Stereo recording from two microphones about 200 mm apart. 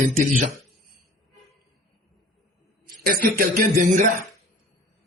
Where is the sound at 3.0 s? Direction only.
50° right (ahead or behind).